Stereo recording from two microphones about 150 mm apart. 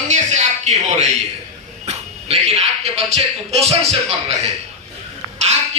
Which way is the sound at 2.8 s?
45° right (ahead or behind).